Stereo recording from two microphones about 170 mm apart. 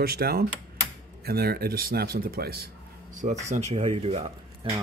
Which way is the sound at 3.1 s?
45° right (ahead or behind).